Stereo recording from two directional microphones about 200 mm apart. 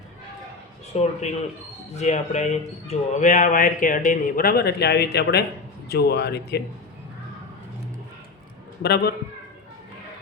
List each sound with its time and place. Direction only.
0.9 s speech: 30° left (ahead or behind); by 6.6 s 55° left (ahead or behind)
8.8 s a man's voice: 55° left (ahead or behind)